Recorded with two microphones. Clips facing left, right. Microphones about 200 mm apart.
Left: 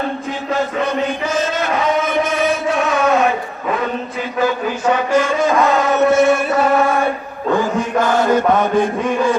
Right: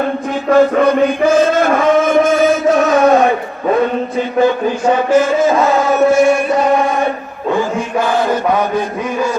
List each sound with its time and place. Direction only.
0.5 s chant: 50° right (ahead or behind); by 3.2 s 35° right (ahead or behind)
5.1 s chant: 5° right (ahead or behind)